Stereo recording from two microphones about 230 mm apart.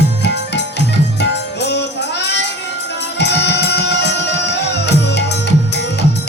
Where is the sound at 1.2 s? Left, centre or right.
Left.